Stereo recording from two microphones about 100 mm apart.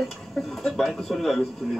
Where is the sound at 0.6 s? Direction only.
Centre (ahead or behind).